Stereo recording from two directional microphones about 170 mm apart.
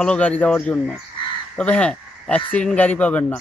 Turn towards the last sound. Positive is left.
turn(degrees=10)  # may be behind; listen again after turning